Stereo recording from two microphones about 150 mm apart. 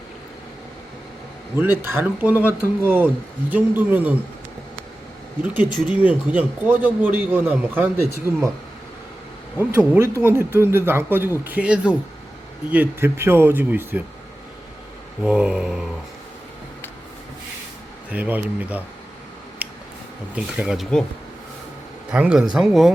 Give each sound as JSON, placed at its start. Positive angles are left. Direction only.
{"t": 1.8, "sound": "speech", "side_deg": -10}
{"t": 5.4, "sound": "speech", "side_deg": -10}
{"t": 9.6, "sound": "speech", "side_deg": -15}
{"t": 15.2, "sound": "speech", "side_deg": -5}
{"t": 18.1, "sound": "speech", "side_deg": -10}
{"t": 19.6, "sound": "a sound", "side_deg": -10}
{"t": 20.3, "sound": "speech", "side_deg": -5}
{"t": 22.1, "sound": "speech", "side_deg": -5}